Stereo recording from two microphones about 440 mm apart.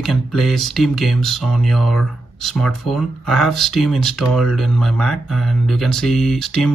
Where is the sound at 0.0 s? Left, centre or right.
Centre.